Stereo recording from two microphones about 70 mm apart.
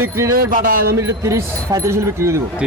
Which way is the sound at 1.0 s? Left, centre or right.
Right.